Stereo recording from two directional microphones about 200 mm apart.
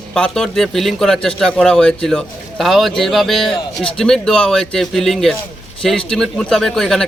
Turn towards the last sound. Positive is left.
turn(degrees=0)  # may be behind; listen again after turning